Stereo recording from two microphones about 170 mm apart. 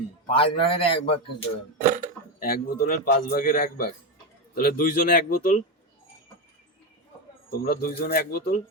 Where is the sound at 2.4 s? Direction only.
60° left (ahead or behind).